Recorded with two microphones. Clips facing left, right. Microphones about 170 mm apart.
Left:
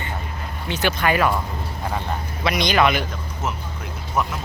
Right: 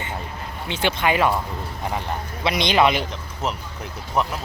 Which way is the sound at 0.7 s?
25° right (ahead or behind).